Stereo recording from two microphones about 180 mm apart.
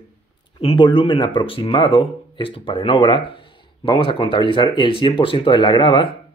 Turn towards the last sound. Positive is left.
turn(degrees=25)  # may be behind; listen again after turning